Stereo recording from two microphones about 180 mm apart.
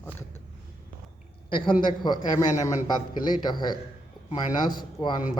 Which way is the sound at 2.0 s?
25° left (ahead or behind).